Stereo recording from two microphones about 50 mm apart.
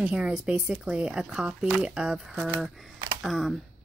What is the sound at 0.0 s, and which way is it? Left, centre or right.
Speech, right.